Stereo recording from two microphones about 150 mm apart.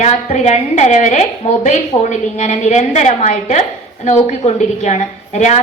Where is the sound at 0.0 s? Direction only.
50° left (ahead or behind).